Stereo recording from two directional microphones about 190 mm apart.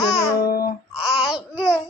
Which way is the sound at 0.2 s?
55° left (ahead or behind).